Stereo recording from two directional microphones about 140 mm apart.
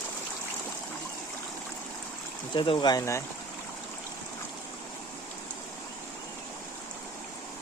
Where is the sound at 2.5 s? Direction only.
35° left (ahead or behind).